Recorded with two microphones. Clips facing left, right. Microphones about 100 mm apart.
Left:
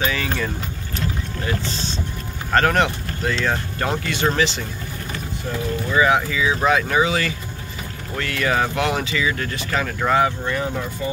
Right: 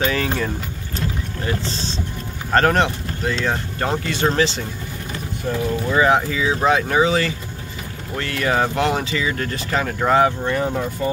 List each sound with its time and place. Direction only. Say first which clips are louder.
0.0 s speech: right 2 dB; 40° right (ahead or behind)
2.5 s speech: right 1 dB; 30° right (ahead or behind)
5.9 s speech: right 1 dB; 35° right (ahead or behind)